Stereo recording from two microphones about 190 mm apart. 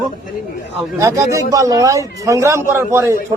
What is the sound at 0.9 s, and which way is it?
A man's voice, 15° right (ahead or behind).